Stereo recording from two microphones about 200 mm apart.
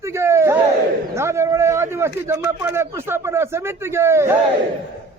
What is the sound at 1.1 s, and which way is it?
A man's voice, 15° right (ahead or behind).